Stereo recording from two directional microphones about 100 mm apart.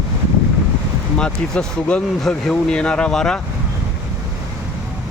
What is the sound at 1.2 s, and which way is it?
Speech, 10° left (ahead or behind).